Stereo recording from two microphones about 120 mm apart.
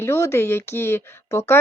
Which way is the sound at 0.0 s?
20° left (ahead or behind).